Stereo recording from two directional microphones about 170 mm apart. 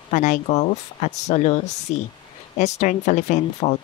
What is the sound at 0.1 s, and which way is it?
Speech, 45° left (ahead or behind).